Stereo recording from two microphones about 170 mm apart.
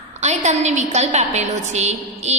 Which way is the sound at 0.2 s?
40° right (ahead or behind).